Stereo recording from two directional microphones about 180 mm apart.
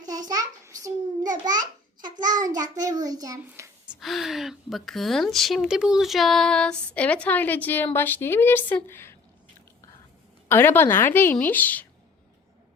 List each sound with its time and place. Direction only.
0.3 s child singing: 20° right (ahead or behind)
1.3 s a child's voice: 20° right (ahead or behind)
3.4 s a woman's voice: 10° right (ahead or behind); by 9.1 s 15° left (ahead or behind)
10.5 s a woman's voice: 10° left (ahead or behind)